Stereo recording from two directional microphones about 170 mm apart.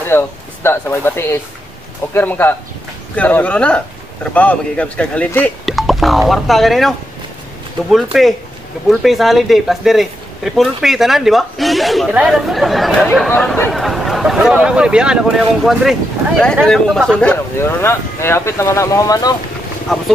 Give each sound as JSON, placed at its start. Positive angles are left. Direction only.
{"t": 0.1, "sound": "speech", "side_deg": 15}
{"t": 19.9, "sound": "speech", "side_deg": 0}